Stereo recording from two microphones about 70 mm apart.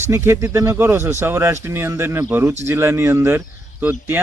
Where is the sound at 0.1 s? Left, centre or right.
Right.